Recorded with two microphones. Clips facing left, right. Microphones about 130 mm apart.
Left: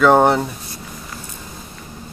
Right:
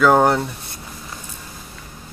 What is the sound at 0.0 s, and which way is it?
Speech, centre (ahead or behind).